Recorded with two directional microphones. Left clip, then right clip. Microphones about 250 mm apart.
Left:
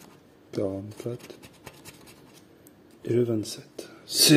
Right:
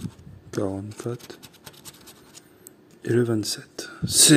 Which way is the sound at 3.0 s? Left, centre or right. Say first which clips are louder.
Right 3 dB; centre.